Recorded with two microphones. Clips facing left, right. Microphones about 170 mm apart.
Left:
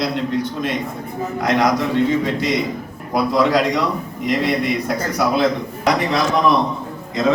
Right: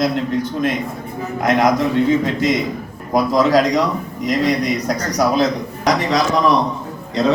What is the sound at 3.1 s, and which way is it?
A man's voice, 45° right (ahead or behind).